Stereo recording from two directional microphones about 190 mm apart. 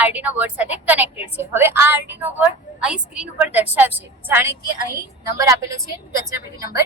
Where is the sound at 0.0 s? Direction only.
10° right (ahead or behind).